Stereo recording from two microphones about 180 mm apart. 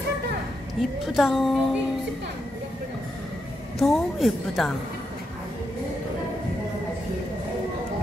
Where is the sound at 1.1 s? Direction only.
Centre (ahead or behind).